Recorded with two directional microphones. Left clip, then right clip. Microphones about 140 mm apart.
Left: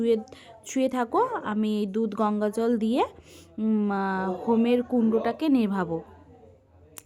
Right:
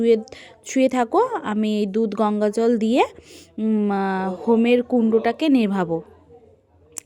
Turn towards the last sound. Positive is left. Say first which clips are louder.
# right 5 dB
turn(degrees=-30)  # may be behind; listen again after turning